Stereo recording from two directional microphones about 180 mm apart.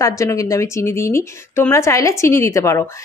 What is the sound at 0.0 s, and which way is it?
Speech, 15° left (ahead or behind).